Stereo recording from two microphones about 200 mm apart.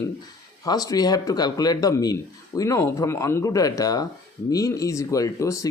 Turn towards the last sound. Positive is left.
turn(degrees=15)  # may be behind; listen again after turning